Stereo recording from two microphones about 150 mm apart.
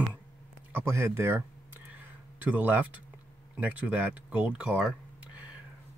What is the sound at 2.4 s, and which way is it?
Speech, 10° right (ahead or behind).